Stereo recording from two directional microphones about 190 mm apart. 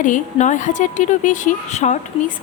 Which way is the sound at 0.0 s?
40° left (ahead or behind).